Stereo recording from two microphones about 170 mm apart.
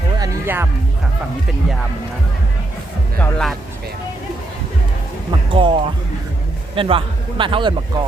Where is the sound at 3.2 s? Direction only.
5° left (ahead or behind).